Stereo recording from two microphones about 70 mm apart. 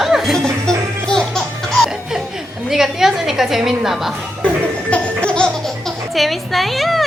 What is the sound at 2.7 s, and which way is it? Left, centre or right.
A woman's voice, centre.